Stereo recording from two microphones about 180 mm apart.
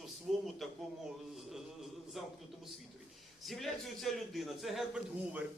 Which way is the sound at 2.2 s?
Centre (ahead or behind).